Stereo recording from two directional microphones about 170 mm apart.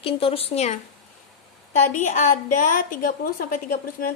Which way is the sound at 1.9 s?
45° left (ahead or behind).